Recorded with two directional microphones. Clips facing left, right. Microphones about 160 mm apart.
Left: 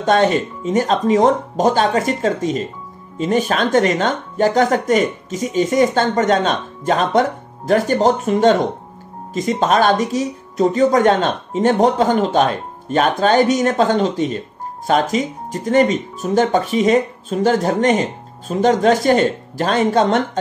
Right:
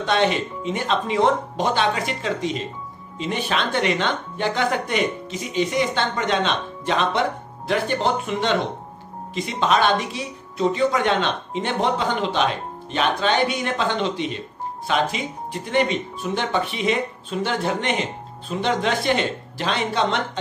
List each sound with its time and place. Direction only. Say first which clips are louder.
0.0 s speech: left 6 dB; 45° left (ahead or behind)